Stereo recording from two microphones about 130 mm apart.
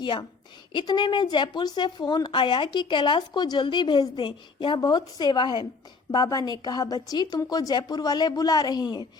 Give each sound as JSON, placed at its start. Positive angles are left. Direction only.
{"t": 0.0, "sound": "a woman's voice", "side_deg": 35}